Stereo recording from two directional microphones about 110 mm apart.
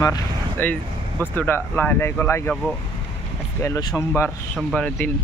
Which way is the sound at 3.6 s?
25° left (ahead or behind).